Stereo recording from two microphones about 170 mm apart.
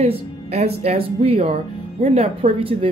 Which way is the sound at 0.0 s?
35° right (ahead or behind).